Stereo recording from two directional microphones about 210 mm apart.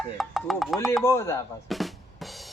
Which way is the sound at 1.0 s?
15° left (ahead or behind).